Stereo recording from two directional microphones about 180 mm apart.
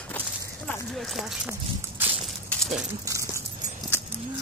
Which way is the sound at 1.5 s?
10° right (ahead or behind).